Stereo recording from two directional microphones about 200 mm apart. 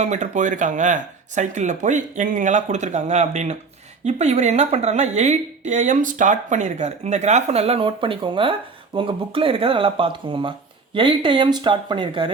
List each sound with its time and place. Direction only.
0.0 s a woman's voice: 35° right (ahead or behind)